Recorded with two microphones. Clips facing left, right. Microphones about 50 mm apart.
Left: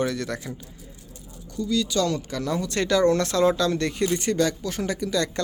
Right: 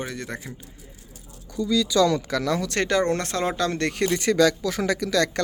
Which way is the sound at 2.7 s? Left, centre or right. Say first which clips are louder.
Left 4 dB; right.